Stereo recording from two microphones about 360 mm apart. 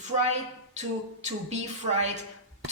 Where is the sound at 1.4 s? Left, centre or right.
Centre.